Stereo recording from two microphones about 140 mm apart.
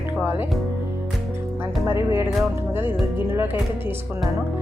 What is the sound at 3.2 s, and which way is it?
Speech, 15° right (ahead or behind).